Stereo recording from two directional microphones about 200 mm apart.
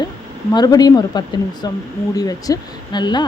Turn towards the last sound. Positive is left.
turn(degrees=20)  # may be behind; listen again after turning